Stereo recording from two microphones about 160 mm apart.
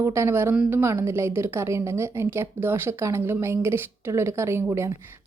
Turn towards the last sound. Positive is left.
turn(degrees=-15)  # may be behind; listen again after turning